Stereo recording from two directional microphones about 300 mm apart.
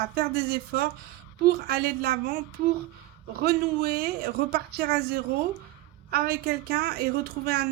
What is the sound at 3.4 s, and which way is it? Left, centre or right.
Speech, right.